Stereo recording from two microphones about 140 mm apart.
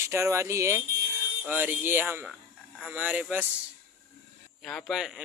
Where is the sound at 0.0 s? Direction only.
20° right (ahead or behind).